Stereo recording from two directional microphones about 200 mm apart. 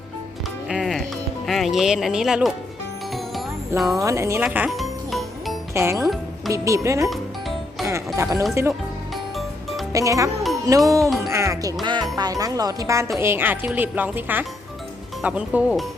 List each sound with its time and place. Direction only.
0.7 s music: centre (ahead or behind)
1.5 s speech: centre (ahead or behind)
3.8 s speech: centre (ahead or behind)
4.0 s speech: 15° right (ahead or behind)
4.4 s music: 5° right (ahead or behind)
5.7 s speech: 15° right (ahead or behind)
7.1 s music: centre (ahead or behind)
7.9 s music: 15° right (ahead or behind)
9.9 s speech: 15° right (ahead or behind)
11.0 s speech: centre (ahead or behind)
11.3 s music: 15° right (ahead or behind)
12.1 s speech: 20° right (ahead or behind); by 15.9 s 5° right (ahead or behind)